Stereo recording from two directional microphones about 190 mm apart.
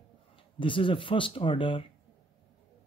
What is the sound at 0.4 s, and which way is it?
A man's voice, 25° left (ahead or behind).